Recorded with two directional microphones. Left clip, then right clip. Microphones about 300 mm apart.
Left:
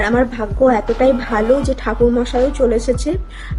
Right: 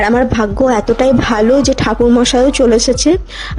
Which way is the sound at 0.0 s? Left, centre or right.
Right.